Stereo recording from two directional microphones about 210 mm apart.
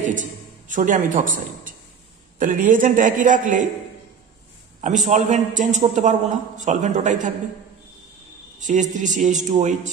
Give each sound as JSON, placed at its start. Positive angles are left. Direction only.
{"t": 0.0, "sound": "music", "side_deg": -40}
{"t": 2.3, "sound": "a man's voice", "side_deg": -40}
{"t": 4.8, "sound": "a man's voice", "side_deg": -35}
{"t": 8.5, "sound": "a man's voice", "side_deg": -35}